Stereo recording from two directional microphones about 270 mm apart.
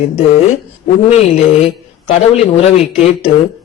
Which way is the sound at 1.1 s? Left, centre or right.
Left.